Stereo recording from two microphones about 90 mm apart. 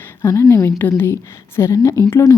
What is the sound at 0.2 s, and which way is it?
A woman's voice, 35° left (ahead or behind).